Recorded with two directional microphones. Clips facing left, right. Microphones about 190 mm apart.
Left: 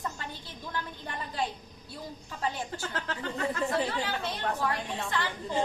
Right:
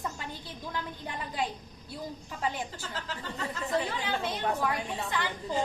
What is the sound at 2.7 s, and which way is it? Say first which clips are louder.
Speech: left 3 dB; 60° left (ahead or behind).